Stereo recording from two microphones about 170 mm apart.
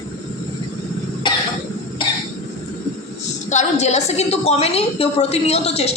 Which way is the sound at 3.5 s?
45° left (ahead or behind).